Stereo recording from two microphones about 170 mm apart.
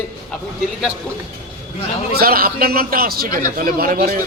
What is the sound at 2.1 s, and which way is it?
A man's voice, 60° right (ahead or behind).